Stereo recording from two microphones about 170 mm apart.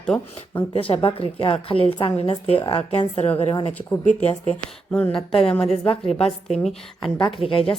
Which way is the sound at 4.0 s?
45° left (ahead or behind).